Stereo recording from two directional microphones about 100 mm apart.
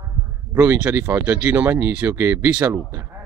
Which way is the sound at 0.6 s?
15° right (ahead or behind).